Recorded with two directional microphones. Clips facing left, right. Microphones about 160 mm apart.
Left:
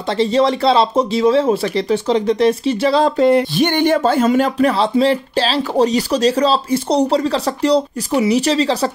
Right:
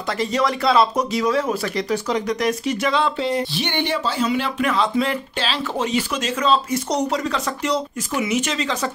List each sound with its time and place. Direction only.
0.2 s speech: 30° left (ahead or behind)
3.3 s speech: 55° left (ahead or behind); by 8.9 s 35° left (ahead or behind)